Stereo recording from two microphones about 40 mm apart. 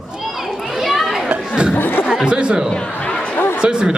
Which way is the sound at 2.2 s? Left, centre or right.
Right.